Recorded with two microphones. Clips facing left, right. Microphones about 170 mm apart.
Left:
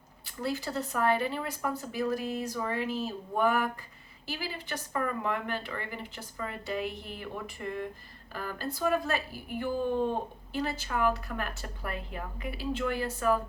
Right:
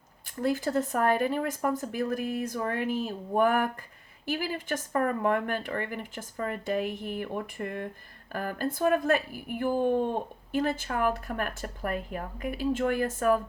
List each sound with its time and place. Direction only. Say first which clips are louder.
0.4 s speech: right 6 dB; 50° right (ahead or behind)